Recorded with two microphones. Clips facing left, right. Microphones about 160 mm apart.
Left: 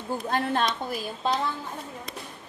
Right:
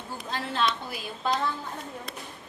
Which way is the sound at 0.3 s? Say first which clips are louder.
Left 2 dB; 50° left (ahead or behind).